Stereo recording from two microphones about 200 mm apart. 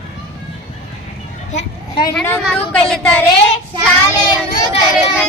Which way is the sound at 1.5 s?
35° left (ahead or behind).